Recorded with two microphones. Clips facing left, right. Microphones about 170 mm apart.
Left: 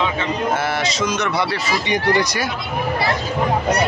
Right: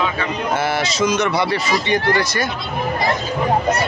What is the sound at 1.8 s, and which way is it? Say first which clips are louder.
Speech: even; 15° left (ahead or behind).